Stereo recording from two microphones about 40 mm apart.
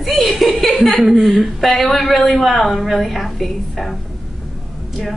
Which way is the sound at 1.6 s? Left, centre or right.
Centre.